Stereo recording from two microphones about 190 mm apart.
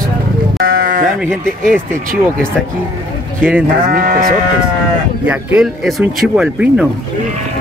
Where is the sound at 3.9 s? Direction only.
50° right (ahead or behind).